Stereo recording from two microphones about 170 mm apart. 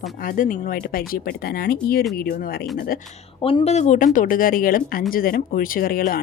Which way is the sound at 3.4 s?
35° left (ahead or behind).